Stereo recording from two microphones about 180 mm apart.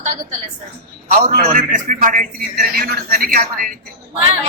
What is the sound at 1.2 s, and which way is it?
A man's voice, 45° right (ahead or behind).